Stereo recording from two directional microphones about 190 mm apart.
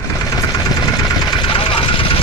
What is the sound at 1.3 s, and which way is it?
Vehicle, 25° left (ahead or behind).